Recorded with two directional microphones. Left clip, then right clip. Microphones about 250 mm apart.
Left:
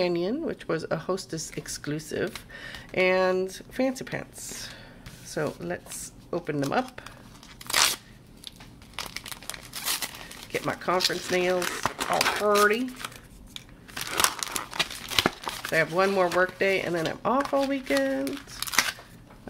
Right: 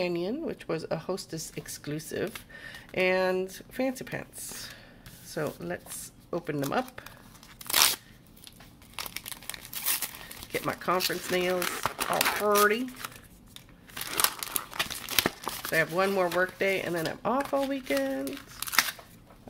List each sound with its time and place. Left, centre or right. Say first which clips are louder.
0.0 s speech: left 4 dB; centre
7.6 s crunch: left 1 dB; centre
8.9 s crumpling: left 2 dB; centre